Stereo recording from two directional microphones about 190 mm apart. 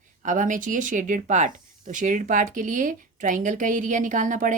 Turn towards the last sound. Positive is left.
turn(degrees=-45)  # may be behind; listen again after turning